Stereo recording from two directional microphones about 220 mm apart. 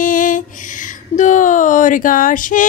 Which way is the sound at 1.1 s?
35° left (ahead or behind).